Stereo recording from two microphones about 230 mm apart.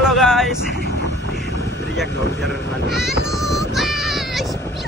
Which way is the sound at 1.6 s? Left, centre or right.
Left.